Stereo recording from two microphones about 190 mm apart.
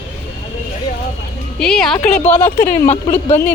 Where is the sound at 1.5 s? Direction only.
5° left (ahead or behind).